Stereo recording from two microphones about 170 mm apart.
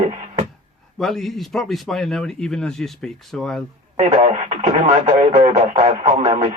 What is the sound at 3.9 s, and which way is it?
Speech, 45° right (ahead or behind).